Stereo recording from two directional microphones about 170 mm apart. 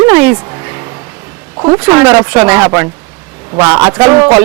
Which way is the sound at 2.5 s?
20° right (ahead or behind).